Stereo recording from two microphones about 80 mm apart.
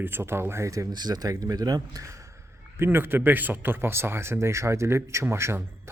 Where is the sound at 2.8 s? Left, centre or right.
Right.